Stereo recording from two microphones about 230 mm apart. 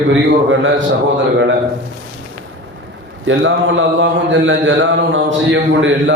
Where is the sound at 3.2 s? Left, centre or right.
Right.